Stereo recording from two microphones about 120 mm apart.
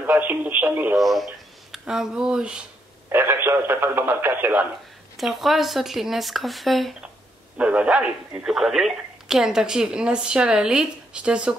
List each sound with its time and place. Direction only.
0.0 s speech: 15° right (ahead or behind)
0.9 s speech: centre (ahead or behind)
3.1 s speech: 20° right (ahead or behind)
5.1 s speech: centre (ahead or behind)